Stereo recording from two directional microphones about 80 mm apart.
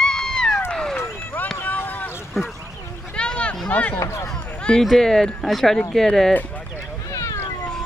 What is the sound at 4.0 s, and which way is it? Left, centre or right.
Speech, left.